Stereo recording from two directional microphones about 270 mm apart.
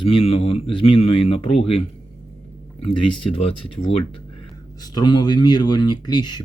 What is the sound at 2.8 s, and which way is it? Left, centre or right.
Speech, centre.